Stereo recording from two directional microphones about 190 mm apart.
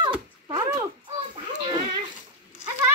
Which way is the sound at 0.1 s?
15° right (ahead or behind).